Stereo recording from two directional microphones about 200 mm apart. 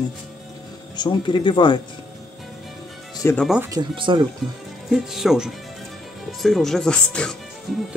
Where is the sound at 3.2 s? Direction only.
15° left (ahead or behind).